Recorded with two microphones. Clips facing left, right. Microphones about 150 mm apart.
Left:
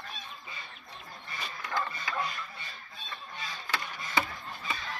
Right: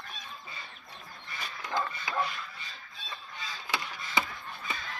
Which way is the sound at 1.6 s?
20° right (ahead or behind).